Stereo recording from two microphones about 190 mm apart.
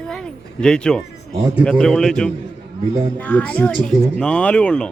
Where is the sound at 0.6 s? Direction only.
5° left (ahead or behind).